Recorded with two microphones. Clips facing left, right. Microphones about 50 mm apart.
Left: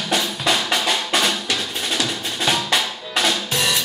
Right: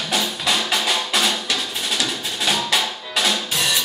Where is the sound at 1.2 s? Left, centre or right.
Centre.